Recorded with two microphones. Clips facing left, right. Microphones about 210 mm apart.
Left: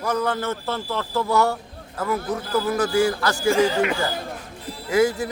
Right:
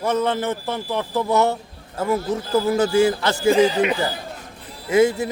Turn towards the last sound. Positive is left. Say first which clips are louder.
# right 3 dB
turn(degrees=-25)  # may be behind; listen again after turning